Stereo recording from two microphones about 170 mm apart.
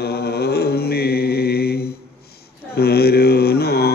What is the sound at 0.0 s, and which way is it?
Mantra, 70° left (ahead or behind).